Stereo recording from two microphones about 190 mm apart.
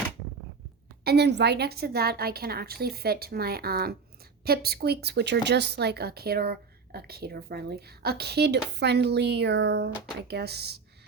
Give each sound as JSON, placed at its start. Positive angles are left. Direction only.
{"t": 1.0, "sound": "speech", "side_deg": -60}